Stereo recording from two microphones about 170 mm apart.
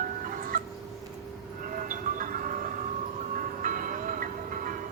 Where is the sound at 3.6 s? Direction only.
55° right (ahead or behind).